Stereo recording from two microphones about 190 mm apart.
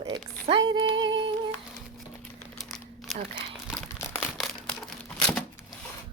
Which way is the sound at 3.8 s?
10° left (ahead or behind).